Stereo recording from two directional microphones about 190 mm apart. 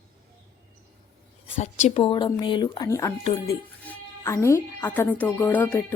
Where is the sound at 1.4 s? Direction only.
30° left (ahead or behind); by 3.1 s 15° left (ahead or behind).